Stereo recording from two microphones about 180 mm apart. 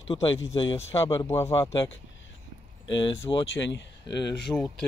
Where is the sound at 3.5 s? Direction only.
85° left.